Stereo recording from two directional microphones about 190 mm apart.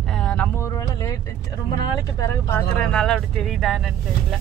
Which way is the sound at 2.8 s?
5° left (ahead or behind).